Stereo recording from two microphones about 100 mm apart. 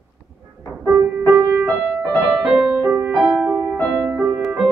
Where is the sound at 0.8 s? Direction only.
25° right (ahead or behind).